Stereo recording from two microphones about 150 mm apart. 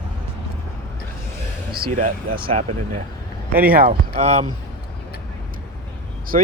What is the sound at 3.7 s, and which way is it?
Speech, 70° right (ahead or behind).